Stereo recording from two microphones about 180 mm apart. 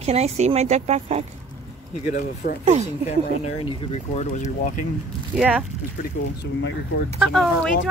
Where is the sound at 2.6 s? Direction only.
35° right (ahead or behind).